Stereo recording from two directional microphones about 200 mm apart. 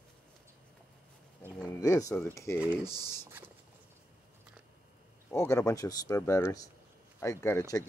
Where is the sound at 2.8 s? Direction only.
15° right (ahead or behind).